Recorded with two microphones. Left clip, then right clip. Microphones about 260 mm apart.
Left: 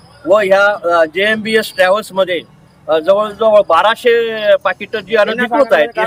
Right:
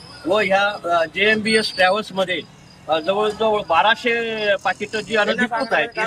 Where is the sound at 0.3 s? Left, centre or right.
Centre.